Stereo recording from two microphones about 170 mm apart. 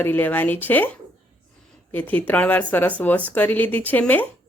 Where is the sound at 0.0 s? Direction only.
10° left (ahead or behind).